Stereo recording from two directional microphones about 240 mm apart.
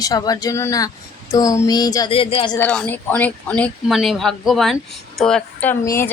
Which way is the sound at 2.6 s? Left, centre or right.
Centre.